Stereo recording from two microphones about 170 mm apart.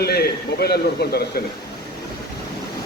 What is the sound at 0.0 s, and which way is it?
A man's voice, 70° left (ahead or behind).